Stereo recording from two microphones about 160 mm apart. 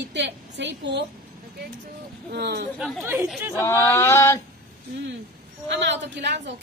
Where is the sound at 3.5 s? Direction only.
15° left (ahead or behind).